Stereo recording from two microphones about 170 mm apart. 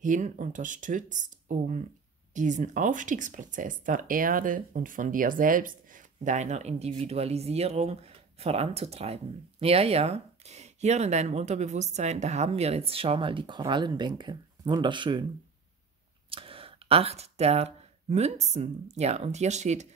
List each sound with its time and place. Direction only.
0.0 s speech: 45° right (ahead or behind); by 15.2 s 25° right (ahead or behind)
16.3 s speech: 30° right (ahead or behind)